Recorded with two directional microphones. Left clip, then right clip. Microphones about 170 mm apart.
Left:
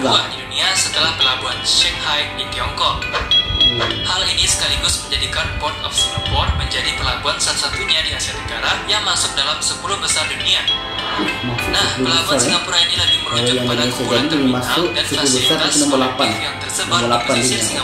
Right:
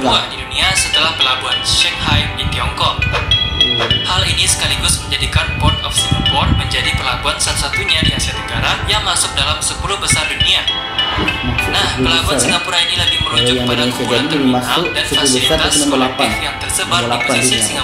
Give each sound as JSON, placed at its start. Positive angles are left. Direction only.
{"t": 0.1, "sound": "speech", "side_deg": -25}
{"t": 3.5, "sound": "speech", "side_deg": -30}
{"t": 7.2, "sound": "speech", "side_deg": -25}
{"t": 11.7, "sound": "speech", "side_deg": -25}